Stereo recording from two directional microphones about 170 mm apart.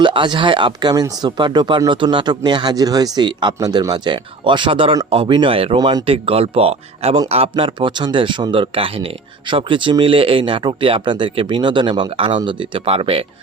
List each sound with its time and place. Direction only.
0.0 s speech: 30° right (ahead or behind)